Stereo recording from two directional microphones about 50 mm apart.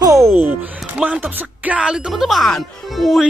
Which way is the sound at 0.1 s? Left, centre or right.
Right.